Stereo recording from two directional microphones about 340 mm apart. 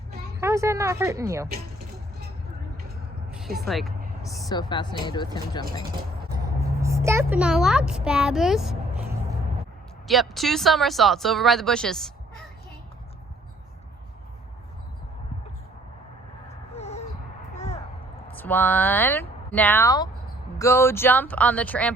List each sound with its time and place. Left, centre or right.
0.3 s speech: centre
3.7 s speech: centre
4.4 s a woman's voice: centre
6.8 s a child's voice: centre
16.7 s a sound: centre
18.3 s speech: centre